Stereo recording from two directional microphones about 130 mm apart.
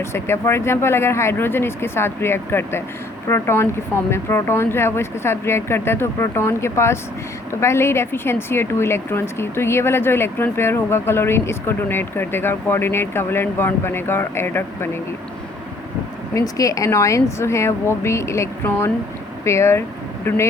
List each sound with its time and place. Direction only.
0.0 s a woman's voice: 20° left (ahead or behind)
16.3 s speech: 25° left (ahead or behind)